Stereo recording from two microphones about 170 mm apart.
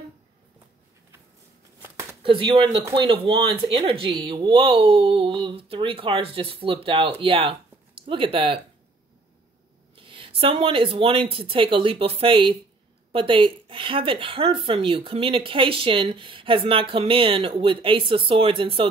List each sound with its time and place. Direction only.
2.2 s speech: 30° right (ahead or behind)
9.9 s speech: 30° right (ahead or behind)